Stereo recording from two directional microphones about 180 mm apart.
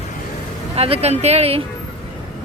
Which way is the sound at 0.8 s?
35° right (ahead or behind).